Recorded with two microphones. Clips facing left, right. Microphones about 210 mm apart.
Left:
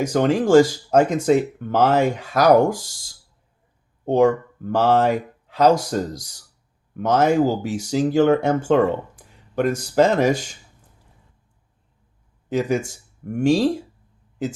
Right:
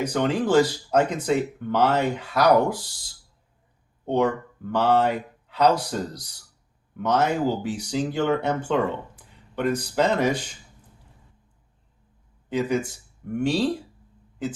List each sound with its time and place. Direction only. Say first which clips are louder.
0.0 s speech: left 5 dB; 45° left (ahead or behind)
4.0 s speech: left 6 dB; 45° left (ahead or behind)
12.5 s speech: left 3 dB; 45° left (ahead or behind)